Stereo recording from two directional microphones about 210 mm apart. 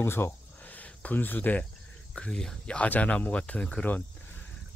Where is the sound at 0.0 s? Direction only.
10° left (ahead or behind).